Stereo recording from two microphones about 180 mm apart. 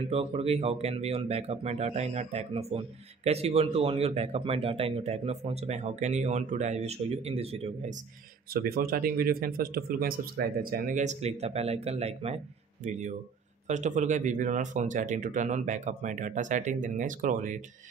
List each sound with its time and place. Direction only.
0.0 s speech: 35° right (ahead or behind)
8.5 s speech: 55° right (ahead or behind)